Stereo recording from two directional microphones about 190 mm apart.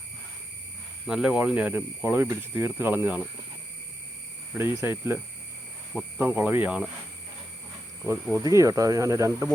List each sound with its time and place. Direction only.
1.0 s speech: 5° right (ahead or behind)
4.5 s speech: 10° right (ahead or behind)
8.0 s speech: 10° right (ahead or behind)